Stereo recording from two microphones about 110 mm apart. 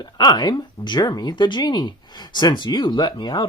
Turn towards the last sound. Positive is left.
turn(degrees=45)  # may be behind; listen again after turning